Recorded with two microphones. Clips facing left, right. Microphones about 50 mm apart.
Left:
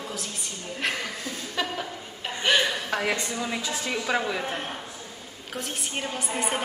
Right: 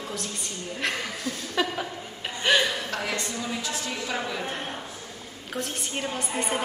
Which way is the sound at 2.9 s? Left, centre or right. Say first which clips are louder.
Left 3 dB; left.